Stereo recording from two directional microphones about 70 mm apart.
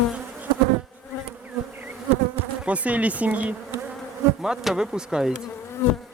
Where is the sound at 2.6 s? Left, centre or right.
Centre.